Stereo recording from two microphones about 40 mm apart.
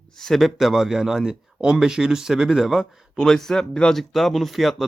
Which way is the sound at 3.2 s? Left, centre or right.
Centre.